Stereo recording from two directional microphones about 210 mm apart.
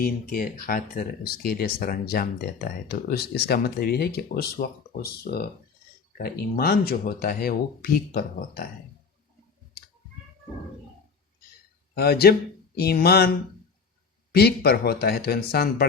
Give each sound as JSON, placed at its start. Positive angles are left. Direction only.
{"t": 0.0, "sound": "speech", "side_deg": 45}
{"t": 11.9, "sound": "speech", "side_deg": 50}
{"t": 14.3, "sound": "speech", "side_deg": 50}